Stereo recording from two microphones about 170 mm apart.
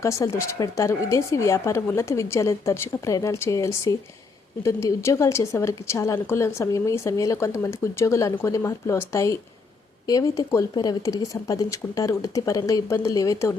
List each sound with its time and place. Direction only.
0.0 s a woman's voice: 20° left (ahead or behind)